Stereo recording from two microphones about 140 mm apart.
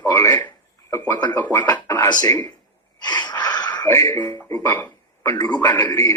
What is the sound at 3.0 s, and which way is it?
Gasp, 30° left (ahead or behind).